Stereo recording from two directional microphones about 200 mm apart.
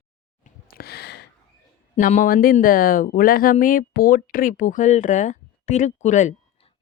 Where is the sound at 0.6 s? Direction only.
50° left (ahead or behind).